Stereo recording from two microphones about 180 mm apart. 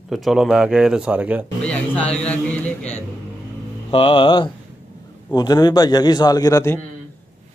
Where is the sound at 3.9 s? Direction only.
30° left (ahead or behind).